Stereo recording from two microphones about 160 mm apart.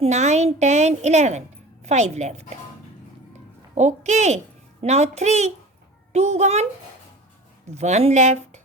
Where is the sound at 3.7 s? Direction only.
45° right (ahead or behind).